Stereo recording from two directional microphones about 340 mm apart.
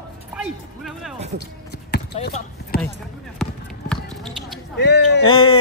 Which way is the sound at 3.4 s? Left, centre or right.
Centre.